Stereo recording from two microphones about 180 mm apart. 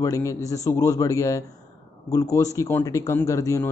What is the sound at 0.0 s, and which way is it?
Speech, 15° left (ahead or behind).